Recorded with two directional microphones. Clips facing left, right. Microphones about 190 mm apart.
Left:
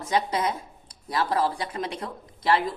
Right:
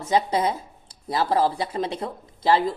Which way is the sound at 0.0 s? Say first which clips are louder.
Right 3 dB; 25° right (ahead or behind).